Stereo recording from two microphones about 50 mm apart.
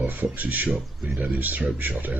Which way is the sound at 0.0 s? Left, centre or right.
Right.